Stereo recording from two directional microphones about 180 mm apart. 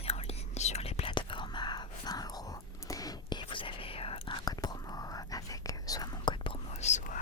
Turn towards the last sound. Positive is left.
turn(degrees=40)  # may be behind; listen again after turning